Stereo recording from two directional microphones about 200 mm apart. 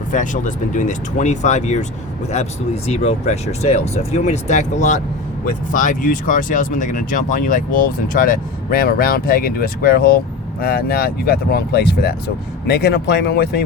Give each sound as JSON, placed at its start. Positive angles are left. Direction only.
{"t": 0.1, "sound": "speech", "side_deg": 40}